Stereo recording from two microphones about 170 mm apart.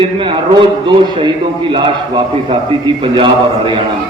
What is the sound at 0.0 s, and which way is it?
A man's voice, 30° right (ahead or behind).